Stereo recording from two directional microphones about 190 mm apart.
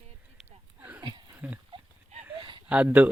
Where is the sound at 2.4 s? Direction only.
25° right (ahead or behind).